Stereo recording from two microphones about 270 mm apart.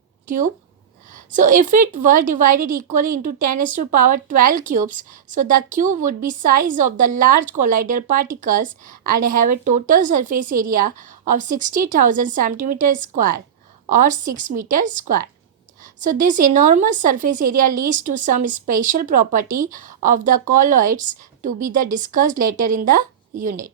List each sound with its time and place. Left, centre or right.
1.1 s a woman's voice: right